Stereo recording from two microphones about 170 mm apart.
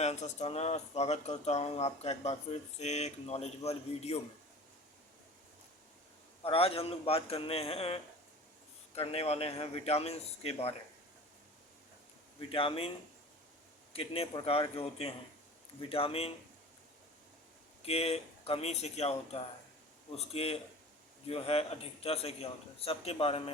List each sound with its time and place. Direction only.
0.0 s speech: 40° left (ahead or behind)
6.4 s speech: 35° left (ahead or behind)
12.4 s speech: 30° left (ahead or behind)
13.9 s speech: 35° left (ahead or behind)
17.8 s speech: 35° left (ahead or behind)